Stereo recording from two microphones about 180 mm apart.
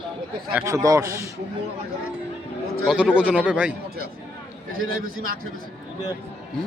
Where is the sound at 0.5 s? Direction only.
15° right (ahead or behind).